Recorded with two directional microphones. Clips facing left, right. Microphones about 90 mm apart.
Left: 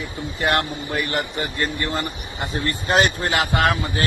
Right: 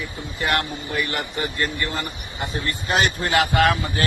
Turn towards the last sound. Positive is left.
turn(degrees=25)  # may be behind; listen again after turning